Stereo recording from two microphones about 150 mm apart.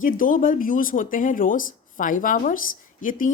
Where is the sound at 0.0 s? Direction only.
65° left (ahead or behind).